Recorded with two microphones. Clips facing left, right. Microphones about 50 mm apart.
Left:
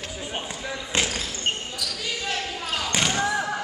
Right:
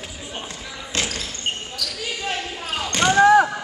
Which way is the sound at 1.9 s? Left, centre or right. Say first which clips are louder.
Right 2 dB; centre.